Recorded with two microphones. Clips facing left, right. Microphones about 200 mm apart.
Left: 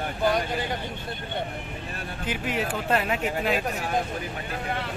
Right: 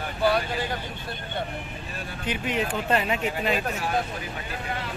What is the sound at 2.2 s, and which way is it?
Speech, 5° left (ahead or behind).